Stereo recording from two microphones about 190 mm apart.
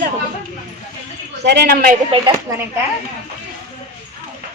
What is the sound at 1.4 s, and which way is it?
Speech, 60° right (ahead or behind).